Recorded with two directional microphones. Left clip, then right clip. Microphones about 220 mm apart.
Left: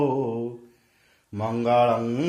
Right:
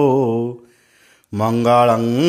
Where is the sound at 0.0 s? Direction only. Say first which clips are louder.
Right 9 dB; 50° right (ahead or behind).